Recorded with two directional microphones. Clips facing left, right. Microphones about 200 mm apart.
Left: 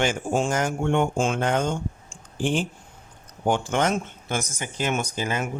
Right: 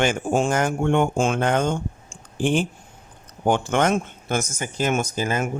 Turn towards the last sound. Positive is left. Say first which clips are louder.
# right 3 dB
turn(degrees=-45)  # may be behind; listen again after turning